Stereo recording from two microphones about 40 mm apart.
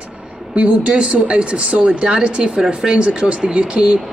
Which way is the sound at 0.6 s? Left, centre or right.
Right.